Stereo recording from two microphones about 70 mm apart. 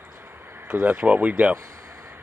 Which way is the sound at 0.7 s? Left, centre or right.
Right.